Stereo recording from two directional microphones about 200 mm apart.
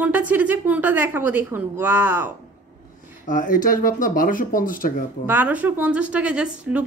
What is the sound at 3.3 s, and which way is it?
Speech, 45° left (ahead or behind).